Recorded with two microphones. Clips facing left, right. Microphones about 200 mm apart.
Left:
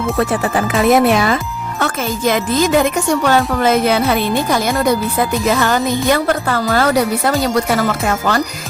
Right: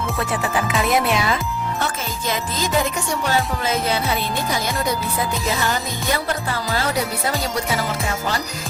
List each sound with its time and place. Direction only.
0.2 s speech: 50° left (ahead or behind)
1.8 s speech: 70° left (ahead or behind)